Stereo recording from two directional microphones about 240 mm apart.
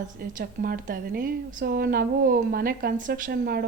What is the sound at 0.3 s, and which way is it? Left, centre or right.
A woman's voice, right.